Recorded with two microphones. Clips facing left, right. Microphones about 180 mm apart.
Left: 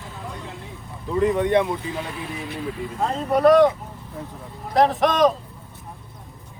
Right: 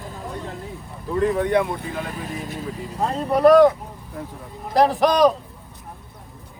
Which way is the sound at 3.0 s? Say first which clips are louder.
Right 1 dB; centre (ahead or behind).